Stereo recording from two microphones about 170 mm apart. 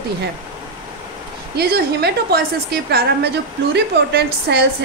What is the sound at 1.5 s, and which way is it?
Speech, 70° right (ahead or behind).